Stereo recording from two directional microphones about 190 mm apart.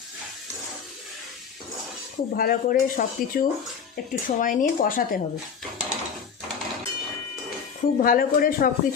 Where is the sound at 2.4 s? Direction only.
45° left (ahead or behind).